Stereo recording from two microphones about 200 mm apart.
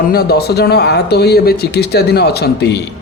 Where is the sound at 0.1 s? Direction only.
55° left (ahead or behind).